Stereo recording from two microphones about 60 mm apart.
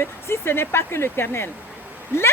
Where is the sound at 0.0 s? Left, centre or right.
Left.